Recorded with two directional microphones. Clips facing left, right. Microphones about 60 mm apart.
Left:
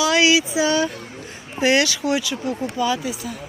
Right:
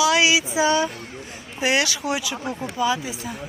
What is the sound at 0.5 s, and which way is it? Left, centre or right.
Speech, centre.